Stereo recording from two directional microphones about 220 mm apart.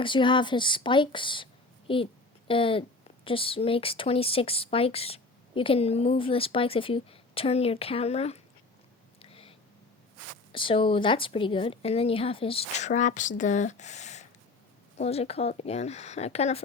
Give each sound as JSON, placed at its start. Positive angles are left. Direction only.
{"t": 0.0, "sound": "speech", "side_deg": 20}
{"t": 9.1, "sound": "a sound", "side_deg": 25}
{"t": 10.5, "sound": "speech", "side_deg": 25}